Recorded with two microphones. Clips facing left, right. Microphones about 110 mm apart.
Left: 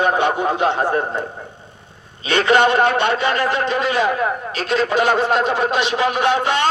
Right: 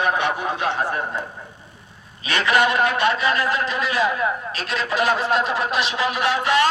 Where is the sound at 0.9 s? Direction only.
35° left (ahead or behind).